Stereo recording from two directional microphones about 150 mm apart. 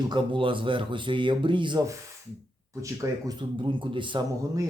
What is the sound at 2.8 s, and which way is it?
A man's voice, 20° right (ahead or behind).